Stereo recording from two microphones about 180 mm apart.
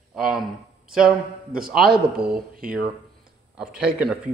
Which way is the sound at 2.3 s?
50° right (ahead or behind).